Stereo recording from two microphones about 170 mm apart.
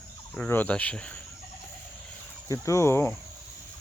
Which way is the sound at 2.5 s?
15° left (ahead or behind).